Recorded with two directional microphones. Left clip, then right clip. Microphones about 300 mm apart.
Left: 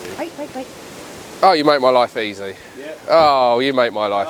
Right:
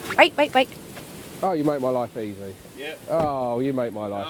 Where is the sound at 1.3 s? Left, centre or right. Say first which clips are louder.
Left 11 dB; centre.